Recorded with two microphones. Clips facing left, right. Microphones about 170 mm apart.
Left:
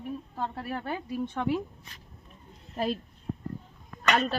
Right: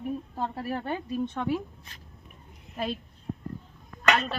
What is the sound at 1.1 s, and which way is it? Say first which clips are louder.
Speech: even; 15° left (ahead or behind).